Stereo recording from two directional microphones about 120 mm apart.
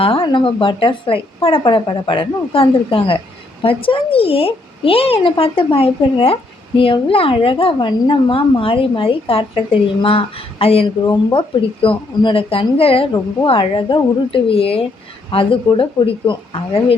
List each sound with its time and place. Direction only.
0.0 s a woman's voice: 45° left (ahead or behind)
11.0 s a woman's voice: 40° left (ahead or behind)